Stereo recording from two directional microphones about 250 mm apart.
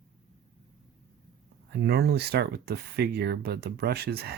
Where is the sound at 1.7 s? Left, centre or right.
Right.